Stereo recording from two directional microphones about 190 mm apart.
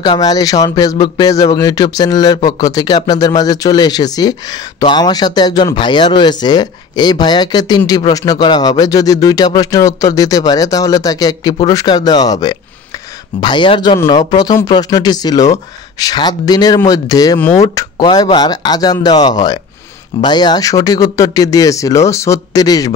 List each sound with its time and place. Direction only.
0.0 s speech: 20° left (ahead or behind)